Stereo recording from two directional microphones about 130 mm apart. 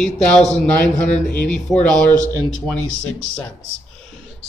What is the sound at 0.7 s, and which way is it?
Speech, 70° left (ahead or behind).